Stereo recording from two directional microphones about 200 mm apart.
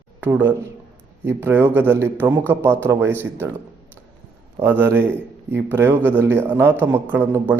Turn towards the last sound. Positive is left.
turn(degrees=-10)  # may be behind; listen again after turning